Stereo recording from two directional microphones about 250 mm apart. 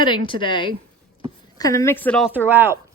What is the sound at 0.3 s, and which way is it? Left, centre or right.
A woman's voice, centre.